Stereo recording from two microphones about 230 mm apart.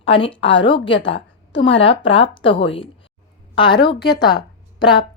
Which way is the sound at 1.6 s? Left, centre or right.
Left.